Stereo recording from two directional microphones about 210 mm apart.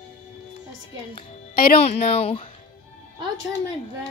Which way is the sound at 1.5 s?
45° left (ahead or behind).